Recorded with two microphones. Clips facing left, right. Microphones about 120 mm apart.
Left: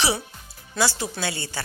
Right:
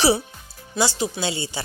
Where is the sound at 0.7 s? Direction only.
20° right (ahead or behind).